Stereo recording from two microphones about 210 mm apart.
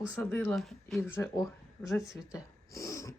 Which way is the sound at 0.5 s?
Centre (ahead or behind).